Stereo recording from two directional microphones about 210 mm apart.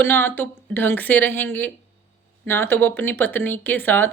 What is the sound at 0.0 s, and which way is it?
Speech, 10° left (ahead or behind).